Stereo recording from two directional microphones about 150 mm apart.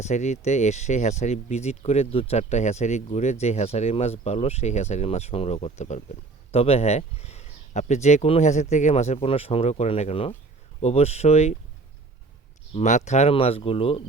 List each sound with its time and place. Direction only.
0.0 s speech: 50° left (ahead or behind)
12.7 s speech: 50° left (ahead or behind)